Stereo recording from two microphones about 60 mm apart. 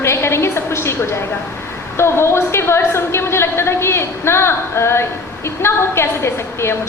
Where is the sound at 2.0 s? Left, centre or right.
Left.